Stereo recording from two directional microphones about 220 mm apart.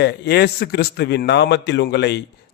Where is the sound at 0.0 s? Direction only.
50° left (ahead or behind).